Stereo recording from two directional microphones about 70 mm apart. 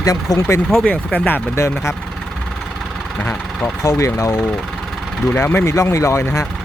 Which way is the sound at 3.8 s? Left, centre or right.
Left.